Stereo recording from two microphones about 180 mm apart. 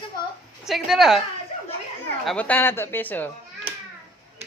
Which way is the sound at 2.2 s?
5° left (ahead or behind).